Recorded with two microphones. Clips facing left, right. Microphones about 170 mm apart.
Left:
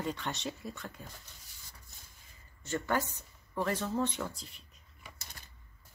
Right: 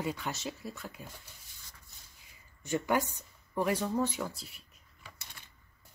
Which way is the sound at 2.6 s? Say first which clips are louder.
Right 3 dB; 15° right (ahead or behind).